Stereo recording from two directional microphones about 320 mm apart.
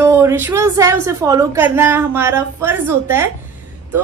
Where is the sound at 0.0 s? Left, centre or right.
Centre.